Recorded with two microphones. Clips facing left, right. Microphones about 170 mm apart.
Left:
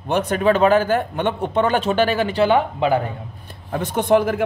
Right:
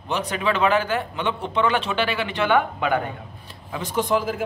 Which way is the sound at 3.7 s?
60° left (ahead or behind).